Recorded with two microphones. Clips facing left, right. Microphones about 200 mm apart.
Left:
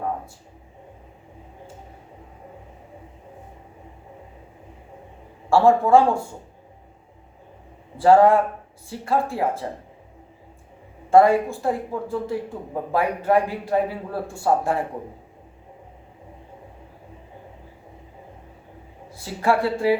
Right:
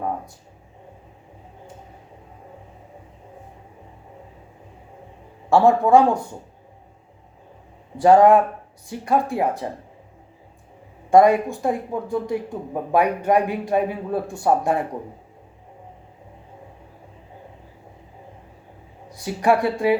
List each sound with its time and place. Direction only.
5.5 s speech: 20° right (ahead or behind)
7.9 s speech: 15° right (ahead or behind)
11.1 s speech: 15° right (ahead or behind)
19.1 s speech: 20° right (ahead or behind)